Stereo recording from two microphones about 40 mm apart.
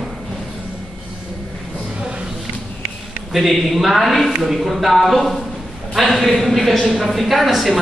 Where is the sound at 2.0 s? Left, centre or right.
Right.